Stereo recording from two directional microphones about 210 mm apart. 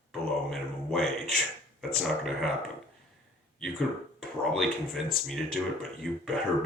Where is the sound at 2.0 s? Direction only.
Centre (ahead or behind).